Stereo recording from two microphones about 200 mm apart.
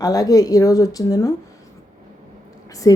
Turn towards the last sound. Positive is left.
turn(degrees=15)  # may be behind; listen again after turning